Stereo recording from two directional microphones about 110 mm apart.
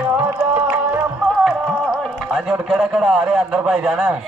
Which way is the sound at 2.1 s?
5° right (ahead or behind).